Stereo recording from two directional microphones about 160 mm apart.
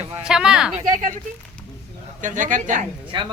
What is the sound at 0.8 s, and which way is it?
Speech, 50° right (ahead or behind).